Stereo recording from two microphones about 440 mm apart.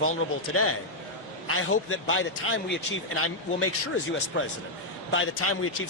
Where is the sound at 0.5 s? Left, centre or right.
Left.